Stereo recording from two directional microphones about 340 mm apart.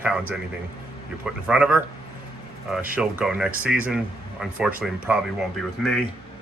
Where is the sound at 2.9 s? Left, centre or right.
Centre.